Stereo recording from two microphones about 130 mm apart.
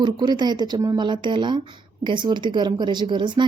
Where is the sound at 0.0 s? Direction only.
35° right (ahead or behind).